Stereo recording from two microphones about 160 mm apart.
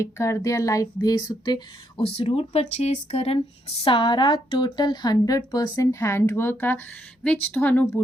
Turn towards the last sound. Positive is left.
turn(degrees=10)  # may be behind; listen again after turning